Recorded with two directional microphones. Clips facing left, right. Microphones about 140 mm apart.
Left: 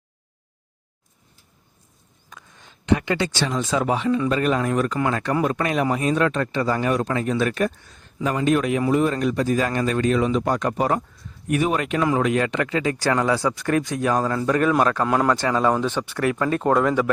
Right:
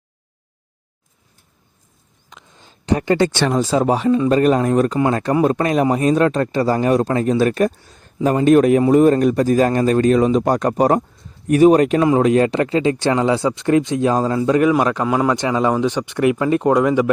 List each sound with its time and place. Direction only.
2.3 s a sound: 30° right (ahead or behind); by 3.5 s 55° right (ahead or behind)
3.5 s speech: 35° right (ahead or behind); by 14.7 s 20° right (ahead or behind)
15.0 s a man's voice: 5° right (ahead or behind)
15.4 s speech: 15° right (ahead or behind)